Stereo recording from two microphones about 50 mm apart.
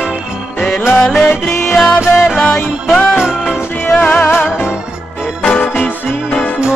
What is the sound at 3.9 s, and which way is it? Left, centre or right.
Music, left.